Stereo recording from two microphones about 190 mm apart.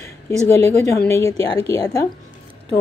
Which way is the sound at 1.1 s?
15° left (ahead or behind).